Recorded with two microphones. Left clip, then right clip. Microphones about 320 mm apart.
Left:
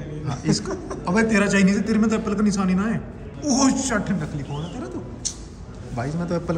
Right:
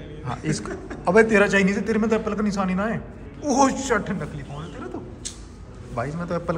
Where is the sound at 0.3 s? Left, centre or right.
Centre.